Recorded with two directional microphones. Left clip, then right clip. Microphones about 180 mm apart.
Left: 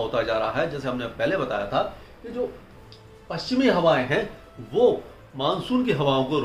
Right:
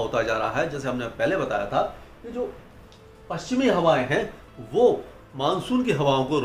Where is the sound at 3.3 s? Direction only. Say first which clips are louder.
Left 1 dB; 5° right (ahead or behind).